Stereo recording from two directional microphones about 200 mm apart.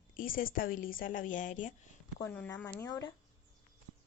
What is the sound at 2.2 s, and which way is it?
Speech, 10° left (ahead or behind).